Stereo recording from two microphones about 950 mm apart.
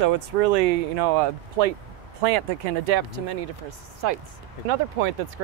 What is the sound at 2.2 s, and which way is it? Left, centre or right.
Speech, right.